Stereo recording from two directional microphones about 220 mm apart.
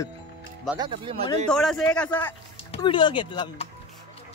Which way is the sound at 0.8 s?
20° right (ahead or behind).